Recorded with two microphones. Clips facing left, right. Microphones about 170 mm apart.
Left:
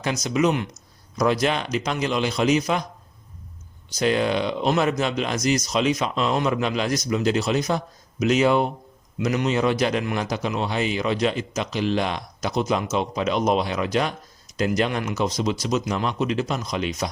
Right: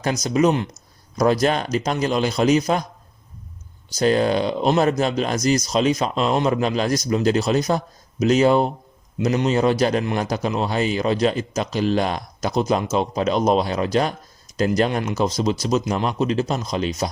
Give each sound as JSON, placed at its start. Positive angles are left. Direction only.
{"t": 0.0, "sound": "a man's voice", "side_deg": -40}
{"t": 3.9, "sound": "a man's voice", "side_deg": -40}